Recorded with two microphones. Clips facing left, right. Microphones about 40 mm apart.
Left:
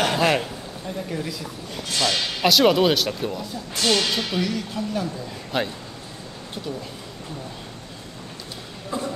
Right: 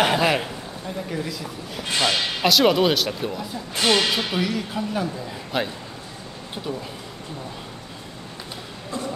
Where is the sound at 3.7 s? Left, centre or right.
Right.